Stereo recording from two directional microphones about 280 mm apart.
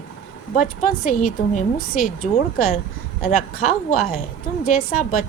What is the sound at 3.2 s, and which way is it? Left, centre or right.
Speech, left.